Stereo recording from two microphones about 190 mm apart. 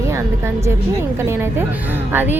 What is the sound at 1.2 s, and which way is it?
Speech, 15° right (ahead or behind).